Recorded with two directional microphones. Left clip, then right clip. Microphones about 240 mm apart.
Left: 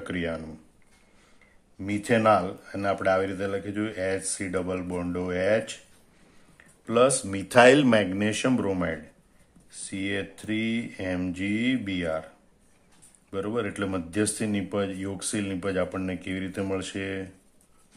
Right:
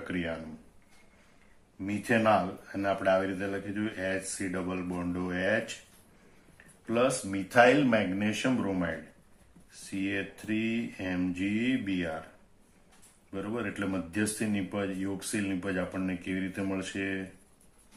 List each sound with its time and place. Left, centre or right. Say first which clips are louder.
0.1 s speech: left 4 dB; left
1.9 s speech: left 4 dB; left
6.9 s speech: left 6 dB; left
13.3 s speech: left 6 dB; left